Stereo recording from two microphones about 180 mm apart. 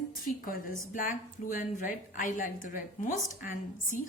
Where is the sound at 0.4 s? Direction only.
50° left (ahead or behind).